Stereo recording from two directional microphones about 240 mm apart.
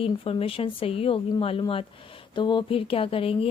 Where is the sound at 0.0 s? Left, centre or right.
Left.